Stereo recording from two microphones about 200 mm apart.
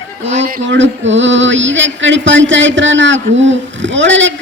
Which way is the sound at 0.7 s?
65° right (ahead or behind).